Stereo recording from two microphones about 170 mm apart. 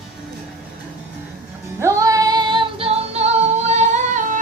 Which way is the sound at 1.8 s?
15° right (ahead or behind).